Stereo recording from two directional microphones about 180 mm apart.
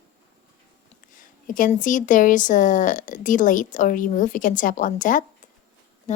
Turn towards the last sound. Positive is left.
turn(degrees=40)  # may be behind; listen again after turning